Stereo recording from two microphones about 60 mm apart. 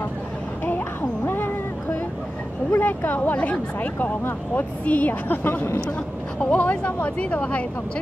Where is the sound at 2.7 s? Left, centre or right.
Left.